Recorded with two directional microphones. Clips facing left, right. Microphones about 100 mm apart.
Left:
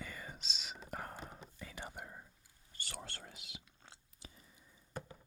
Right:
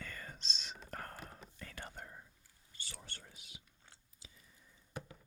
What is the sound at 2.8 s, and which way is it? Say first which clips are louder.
Whispering: left 5 dB; 70° left (ahead or behind).